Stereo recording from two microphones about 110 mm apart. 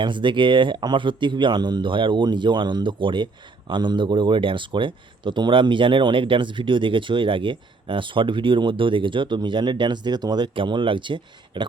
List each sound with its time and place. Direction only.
0.0 s speech: 45° right (ahead or behind)